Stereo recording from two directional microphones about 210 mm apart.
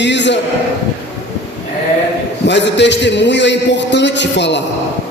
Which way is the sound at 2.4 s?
55° left (ahead or behind).